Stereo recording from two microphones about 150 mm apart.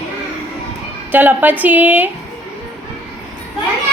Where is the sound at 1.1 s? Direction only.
10° right (ahead or behind).